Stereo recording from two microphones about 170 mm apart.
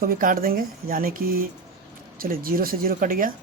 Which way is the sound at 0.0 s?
55° right (ahead or behind).